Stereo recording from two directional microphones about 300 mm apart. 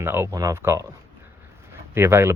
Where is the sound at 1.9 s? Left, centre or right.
Centre.